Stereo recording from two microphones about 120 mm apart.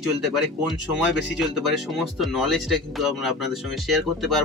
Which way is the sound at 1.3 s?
Centre (ahead or behind).